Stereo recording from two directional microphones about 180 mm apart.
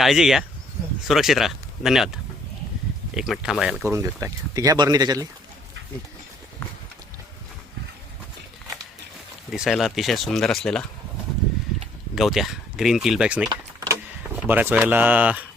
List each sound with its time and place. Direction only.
0.0 s speech: centre (ahead or behind)
3.2 s speech: centre (ahead or behind)
3.9 s speech: 15° right (ahead or behind)
9.5 s speech: centre (ahead or behind)
12.1 s speech: centre (ahead or behind)
13.5 s vehicle: 15° right (ahead or behind)
14.3 s speech: 10° right (ahead or behind)